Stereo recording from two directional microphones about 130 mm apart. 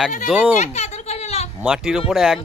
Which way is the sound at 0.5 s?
60° left (ahead or behind).